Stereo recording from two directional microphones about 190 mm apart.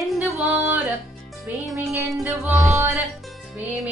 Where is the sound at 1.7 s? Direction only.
10° right (ahead or behind).